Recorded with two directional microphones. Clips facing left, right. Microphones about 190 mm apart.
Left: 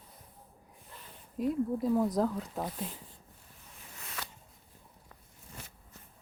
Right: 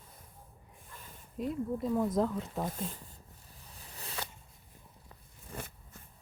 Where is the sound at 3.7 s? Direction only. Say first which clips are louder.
Right 2 dB; 35° right (ahead or behind).